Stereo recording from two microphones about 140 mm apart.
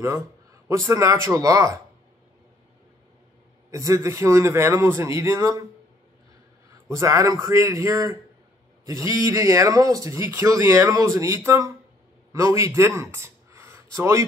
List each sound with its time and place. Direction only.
0.7 s speech: 20° right (ahead or behind)
3.7 s speech: 20° right (ahead or behind)
6.9 s speech: 20° right (ahead or behind)